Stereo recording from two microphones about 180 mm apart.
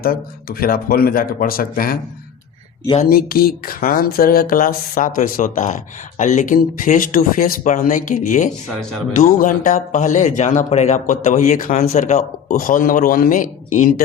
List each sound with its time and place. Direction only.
0.0 s speech: 55° left (ahead or behind)
3.0 s speech: 55° left (ahead or behind)